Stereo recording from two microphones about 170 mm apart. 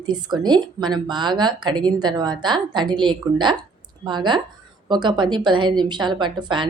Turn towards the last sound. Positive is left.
turn(degrees=-25)  # may be behind; listen again after turning